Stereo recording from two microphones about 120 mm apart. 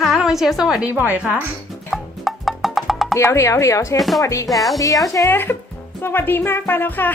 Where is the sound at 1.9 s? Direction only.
Centre (ahead or behind).